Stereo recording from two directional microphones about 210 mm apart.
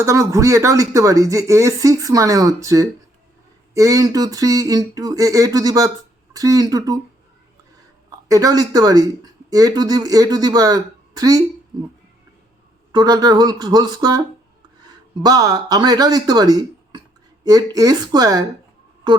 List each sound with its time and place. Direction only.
0.0 s speech: 15° right (ahead or behind)
8.3 s speech: 15° right (ahead or behind)
12.9 s speech: 20° right (ahead or behind)